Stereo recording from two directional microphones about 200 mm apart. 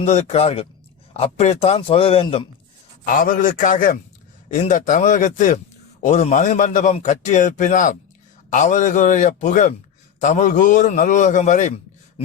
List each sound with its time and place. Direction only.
0.0 s a man's voice: 35° left (ahead or behind)
3.1 s a man's voice: 40° left (ahead or behind)